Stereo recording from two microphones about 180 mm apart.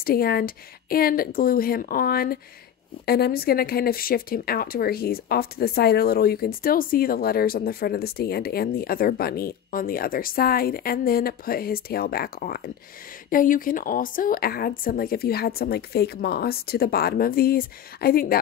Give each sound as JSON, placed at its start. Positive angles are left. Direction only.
{"t": 0.0, "sound": "speech", "side_deg": 55}